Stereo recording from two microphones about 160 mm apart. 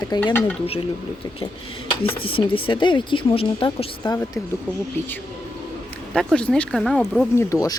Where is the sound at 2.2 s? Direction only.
35° left (ahead or behind).